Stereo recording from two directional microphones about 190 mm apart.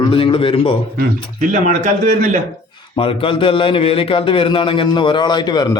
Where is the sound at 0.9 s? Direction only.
40° right (ahead or behind).